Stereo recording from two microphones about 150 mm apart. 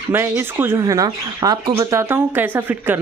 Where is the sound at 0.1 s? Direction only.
15° right (ahead or behind).